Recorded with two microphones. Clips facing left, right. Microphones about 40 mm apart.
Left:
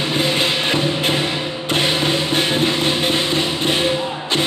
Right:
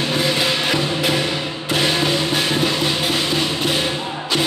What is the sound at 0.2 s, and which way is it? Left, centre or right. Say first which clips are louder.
Music: left 2 dB; left.